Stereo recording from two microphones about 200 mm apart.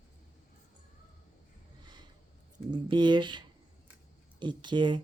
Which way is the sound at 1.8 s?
20° right (ahead or behind).